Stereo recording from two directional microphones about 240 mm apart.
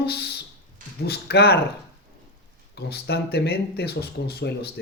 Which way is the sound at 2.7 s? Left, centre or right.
Left.